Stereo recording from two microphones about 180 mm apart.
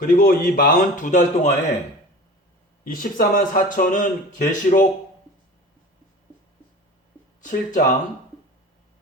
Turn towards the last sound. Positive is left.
turn(degrees=45)  # may be behind; listen again after turning